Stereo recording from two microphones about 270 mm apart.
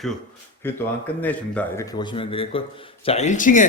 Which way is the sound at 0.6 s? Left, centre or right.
Centre.